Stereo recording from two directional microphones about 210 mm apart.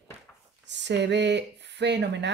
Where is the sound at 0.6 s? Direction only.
55° right (ahead or behind).